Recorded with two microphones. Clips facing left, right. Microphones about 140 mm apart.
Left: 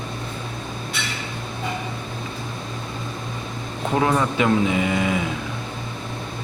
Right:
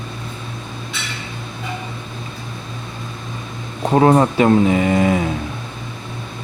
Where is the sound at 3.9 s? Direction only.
40° right (ahead or behind).